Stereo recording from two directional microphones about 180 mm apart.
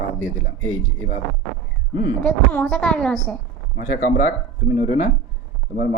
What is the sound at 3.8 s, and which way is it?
Speech, 45° left (ahead or behind).